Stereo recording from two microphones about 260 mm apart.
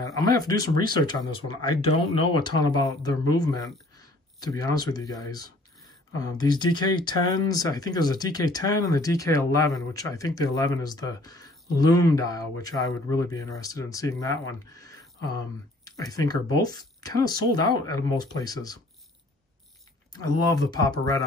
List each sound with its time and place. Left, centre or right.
0.0 s speech: centre
20.1 s speech: centre